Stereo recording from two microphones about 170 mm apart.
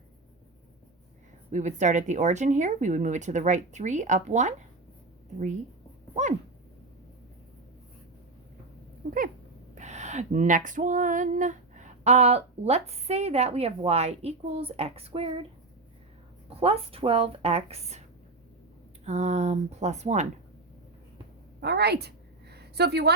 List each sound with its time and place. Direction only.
1.5 s speech: 45° right (ahead or behind)
9.0 s cat: 60° right (ahead or behind)
9.7 s female singing: 45° right (ahead or behind)
16.6 s female singing: 35° right (ahead or behind)
19.0 s female singing: 40° right (ahead or behind)
21.6 s a sound: 75° right (ahead or behind)